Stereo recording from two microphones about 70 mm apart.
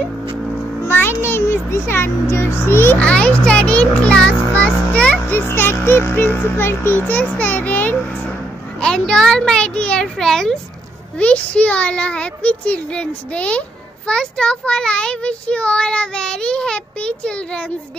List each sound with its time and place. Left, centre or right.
0.8 s a child's voice: left
3.0 s a child's voice: centre
5.3 s a child's voice: left
8.8 s a child's voice: centre
11.1 s a child's voice: centre